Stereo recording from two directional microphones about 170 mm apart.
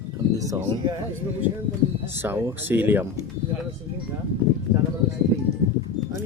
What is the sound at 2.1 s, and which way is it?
Speech, 15° right (ahead or behind).